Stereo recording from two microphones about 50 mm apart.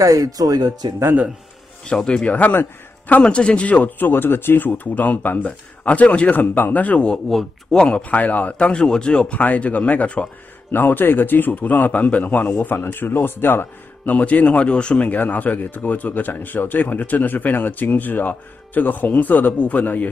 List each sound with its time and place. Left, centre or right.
1.9 s speech: centre
2.3 s speech: left
3.1 s speech: left
6.3 s speech: left; by 8.0 s centre
8.0 s speech: left
9.4 s speech: left
10.7 s speech: left
14.0 s speech: left
15.0 s speech: left